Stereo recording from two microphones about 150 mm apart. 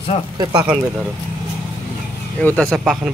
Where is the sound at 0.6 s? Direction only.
10° right (ahead or behind).